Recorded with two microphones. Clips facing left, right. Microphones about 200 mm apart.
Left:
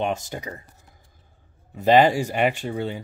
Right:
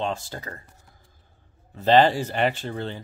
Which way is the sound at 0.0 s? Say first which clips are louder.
Left 3 dB; 20° left (ahead or behind).